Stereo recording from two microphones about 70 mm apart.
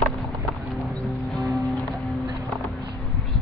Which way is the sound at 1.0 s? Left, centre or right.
Centre.